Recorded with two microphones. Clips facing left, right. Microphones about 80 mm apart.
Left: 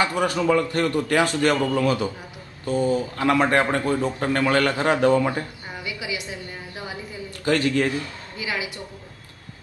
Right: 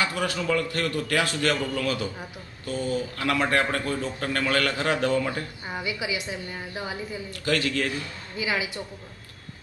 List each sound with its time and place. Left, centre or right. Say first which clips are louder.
0.1 s a man's voice: left 6 dB; centre
5.9 s a woman's voice: even; centre
7.4 s a man's voice: left 5 dB; left
8.4 s a woman's voice: right 1 dB; centre